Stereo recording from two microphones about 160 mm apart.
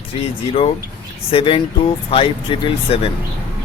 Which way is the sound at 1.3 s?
35° left (ahead or behind).